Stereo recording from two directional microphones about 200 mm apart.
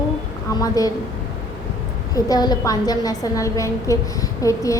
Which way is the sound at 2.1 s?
20° left (ahead or behind).